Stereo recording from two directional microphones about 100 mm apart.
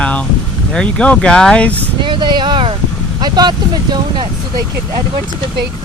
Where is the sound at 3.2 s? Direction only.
45° right (ahead or behind).